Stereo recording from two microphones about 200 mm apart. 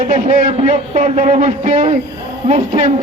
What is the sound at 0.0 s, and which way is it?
A man's voice, 35° right (ahead or behind).